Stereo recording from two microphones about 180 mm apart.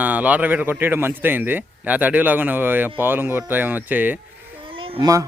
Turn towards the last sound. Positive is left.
turn(degrees=-20)  # may be behind; listen again after turning